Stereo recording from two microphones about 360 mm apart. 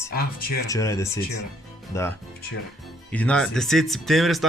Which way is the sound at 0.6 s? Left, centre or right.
Centre.